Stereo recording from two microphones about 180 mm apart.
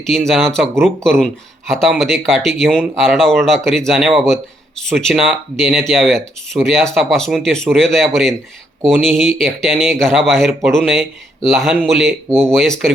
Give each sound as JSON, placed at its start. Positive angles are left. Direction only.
{"t": 0.1, "sound": "speech", "side_deg": 0}